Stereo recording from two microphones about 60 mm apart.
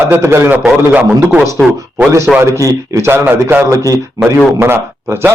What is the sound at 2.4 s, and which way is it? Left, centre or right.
Speech, right.